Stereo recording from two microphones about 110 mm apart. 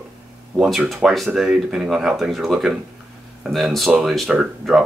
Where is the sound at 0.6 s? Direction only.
Centre (ahead or behind).